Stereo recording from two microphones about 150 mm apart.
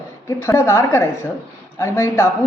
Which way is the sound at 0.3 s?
20° left (ahead or behind).